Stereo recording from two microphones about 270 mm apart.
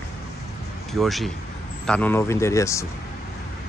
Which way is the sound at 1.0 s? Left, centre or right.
Centre.